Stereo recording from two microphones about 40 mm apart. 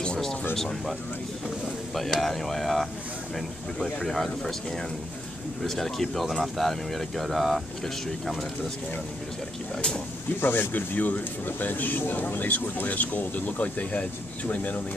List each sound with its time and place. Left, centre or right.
2.0 s speech: centre
5.6 s speech: centre
9.8 s speech: centre
10.4 s speech: left